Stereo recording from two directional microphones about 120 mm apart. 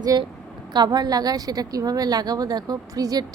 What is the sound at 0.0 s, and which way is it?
A woman's voice, 30° right (ahead or behind).